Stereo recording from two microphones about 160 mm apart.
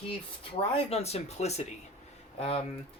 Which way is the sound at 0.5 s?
40° left (ahead or behind).